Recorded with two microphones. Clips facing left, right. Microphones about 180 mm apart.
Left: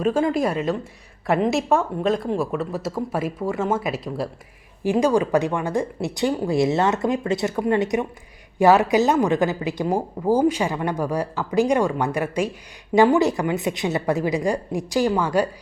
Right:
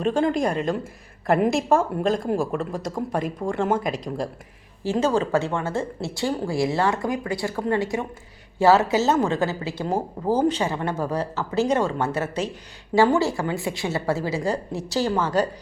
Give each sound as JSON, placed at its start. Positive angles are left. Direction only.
{"t": 0.0, "sound": "speech", "side_deg": 5}